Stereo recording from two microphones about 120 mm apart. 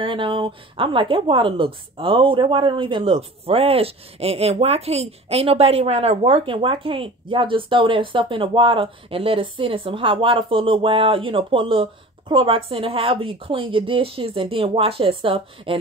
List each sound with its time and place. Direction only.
0.0 s a woman's voice: 45° right (ahead or behind)